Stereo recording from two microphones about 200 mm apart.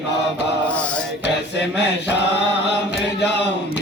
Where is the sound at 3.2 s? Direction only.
60° left (ahead or behind).